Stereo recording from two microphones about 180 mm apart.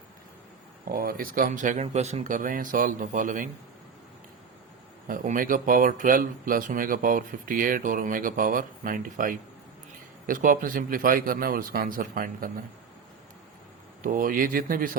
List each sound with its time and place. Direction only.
0.9 s speech: 55° right (ahead or behind)
5.0 s speech: 50° right (ahead or behind)
14.0 s speech: 50° right (ahead or behind)